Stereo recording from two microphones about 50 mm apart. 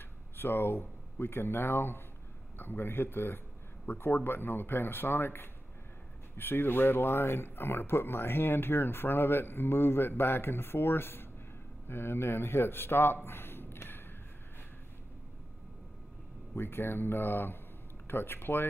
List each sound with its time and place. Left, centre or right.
0.4 s a man's voice: left
16.5 s speech: left